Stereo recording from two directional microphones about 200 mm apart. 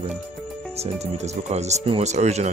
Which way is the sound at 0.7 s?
30° right (ahead or behind).